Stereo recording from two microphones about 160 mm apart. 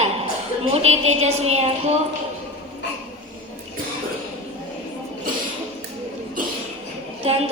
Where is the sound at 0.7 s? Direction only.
40° right (ahead or behind).